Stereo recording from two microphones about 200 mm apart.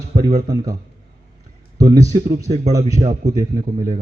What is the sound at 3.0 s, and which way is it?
Speech, 35° right (ahead or behind).